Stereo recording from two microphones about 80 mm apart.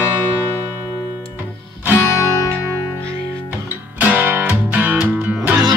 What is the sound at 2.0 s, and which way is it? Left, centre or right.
Music, left.